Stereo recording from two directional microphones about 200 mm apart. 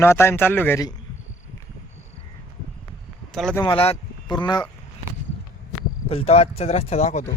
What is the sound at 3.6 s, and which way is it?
Speech, 30° left (ahead or behind).